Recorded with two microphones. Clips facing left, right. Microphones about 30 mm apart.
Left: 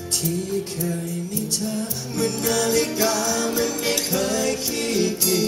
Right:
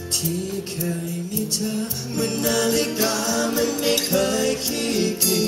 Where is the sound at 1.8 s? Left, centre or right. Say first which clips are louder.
Even; right.